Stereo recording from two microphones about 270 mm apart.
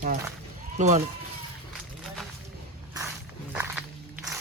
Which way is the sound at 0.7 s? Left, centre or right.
Right.